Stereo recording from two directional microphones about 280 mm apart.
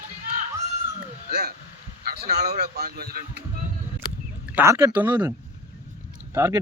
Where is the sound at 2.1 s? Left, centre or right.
Right.